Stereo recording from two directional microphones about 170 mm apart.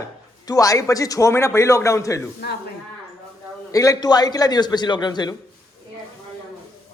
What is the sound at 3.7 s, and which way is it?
A man's voice, 20° left (ahead or behind).